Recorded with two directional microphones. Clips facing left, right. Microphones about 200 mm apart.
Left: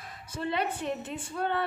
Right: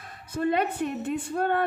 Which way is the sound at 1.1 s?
55° right (ahead or behind).